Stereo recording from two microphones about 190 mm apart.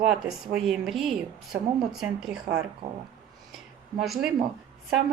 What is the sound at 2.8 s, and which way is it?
Speech, 20° right (ahead or behind).